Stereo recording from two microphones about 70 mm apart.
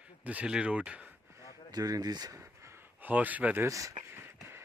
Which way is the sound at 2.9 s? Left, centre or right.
Right.